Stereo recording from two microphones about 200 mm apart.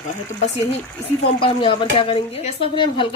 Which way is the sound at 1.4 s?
25° left (ahead or behind).